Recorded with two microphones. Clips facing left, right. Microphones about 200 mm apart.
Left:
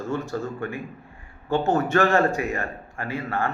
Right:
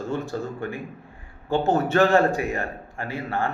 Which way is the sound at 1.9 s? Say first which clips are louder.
Right 3 dB; 15° right (ahead or behind).